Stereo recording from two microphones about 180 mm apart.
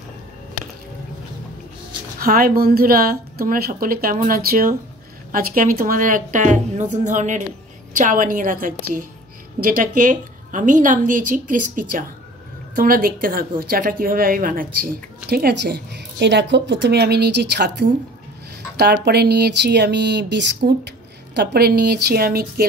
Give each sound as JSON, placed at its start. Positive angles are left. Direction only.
{"t": 2.1, "sound": "a woman's voice", "side_deg": -55}